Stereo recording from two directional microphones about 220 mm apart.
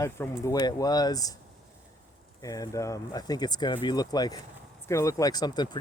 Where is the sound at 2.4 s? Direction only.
15° left (ahead or behind).